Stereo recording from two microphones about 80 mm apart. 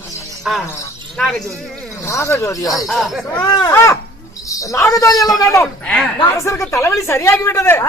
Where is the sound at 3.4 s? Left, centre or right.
Left.